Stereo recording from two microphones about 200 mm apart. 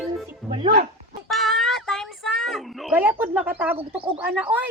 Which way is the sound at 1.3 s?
Centre (ahead or behind).